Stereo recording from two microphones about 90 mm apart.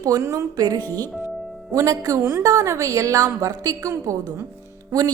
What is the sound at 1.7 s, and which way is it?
A woman's voice, 40° right (ahead or behind).